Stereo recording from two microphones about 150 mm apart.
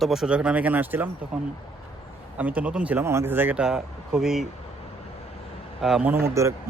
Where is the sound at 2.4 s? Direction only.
10° right (ahead or behind).